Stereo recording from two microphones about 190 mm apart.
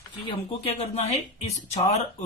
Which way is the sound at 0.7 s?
35° left (ahead or behind).